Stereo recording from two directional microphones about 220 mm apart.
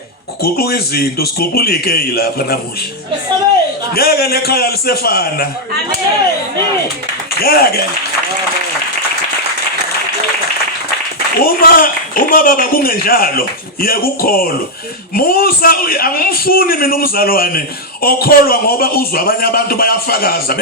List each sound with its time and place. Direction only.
0.4 s a man's voice: 45° left (ahead or behind)
3.9 s a man's voice: 45° left (ahead or behind)
7.4 s a man's voice: 45° left (ahead or behind)
11.3 s a woman's voice: 40° left (ahead or behind)